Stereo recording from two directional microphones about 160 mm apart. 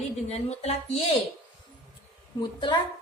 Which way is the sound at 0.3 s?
40° left (ahead or behind).